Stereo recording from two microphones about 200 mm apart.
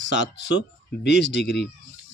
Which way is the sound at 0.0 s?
60° left (ahead or behind).